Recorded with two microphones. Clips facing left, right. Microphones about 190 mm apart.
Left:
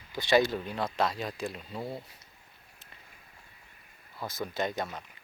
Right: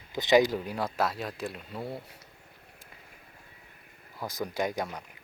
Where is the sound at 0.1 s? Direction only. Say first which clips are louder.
Right 3 dB; 20° right (ahead or behind); by 2.0 s centre (ahead or behind).